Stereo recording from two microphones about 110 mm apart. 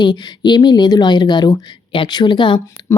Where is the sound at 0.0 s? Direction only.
45° left (ahead or behind).